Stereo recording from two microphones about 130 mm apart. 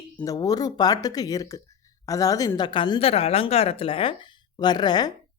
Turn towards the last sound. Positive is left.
turn(degrees=35)  # may be behind; listen again after turning